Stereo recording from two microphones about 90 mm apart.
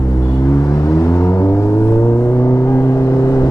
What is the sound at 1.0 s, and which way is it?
Vehicle, 30° left (ahead or behind).